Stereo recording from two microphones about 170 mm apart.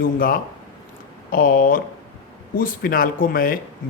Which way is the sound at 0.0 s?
55° left (ahead or behind).